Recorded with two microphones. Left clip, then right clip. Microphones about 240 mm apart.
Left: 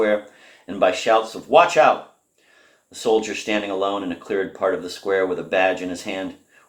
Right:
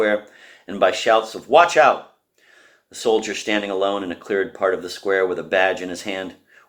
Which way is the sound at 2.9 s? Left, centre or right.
Right.